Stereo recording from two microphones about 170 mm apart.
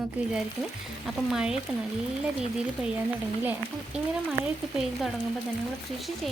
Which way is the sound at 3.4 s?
10° right (ahead or behind).